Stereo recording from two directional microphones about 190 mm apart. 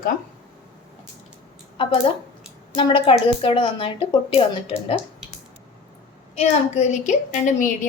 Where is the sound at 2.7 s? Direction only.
30° left (ahead or behind).